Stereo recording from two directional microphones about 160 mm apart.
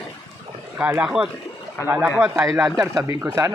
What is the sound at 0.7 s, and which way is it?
Speech, 10° right (ahead or behind).